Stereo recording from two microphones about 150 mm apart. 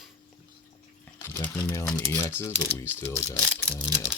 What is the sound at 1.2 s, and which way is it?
Speech, 15° left (ahead or behind).